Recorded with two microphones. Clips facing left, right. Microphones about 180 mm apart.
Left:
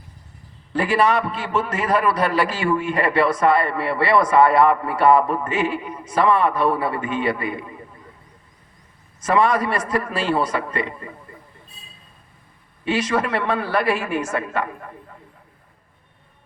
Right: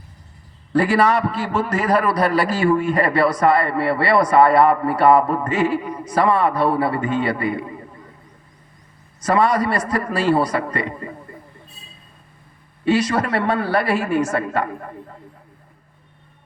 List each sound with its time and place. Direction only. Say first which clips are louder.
0.7 s a man's voice: right 2 dB; 35° right (ahead or behind)
9.2 s a man's voice: right 1 dB; 35° right (ahead or behind)
12.8 s a man's voice: right 3 dB; 35° right (ahead or behind)